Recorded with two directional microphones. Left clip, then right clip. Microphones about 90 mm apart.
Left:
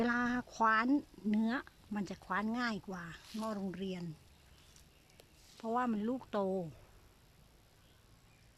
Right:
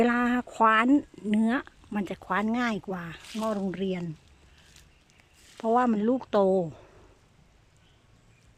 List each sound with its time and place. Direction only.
0.0 s speech: 30° right (ahead or behind); by 4.0 s 45° right (ahead or behind)
5.5 s speech: 80° right; by 6.7 s 65° right (ahead or behind)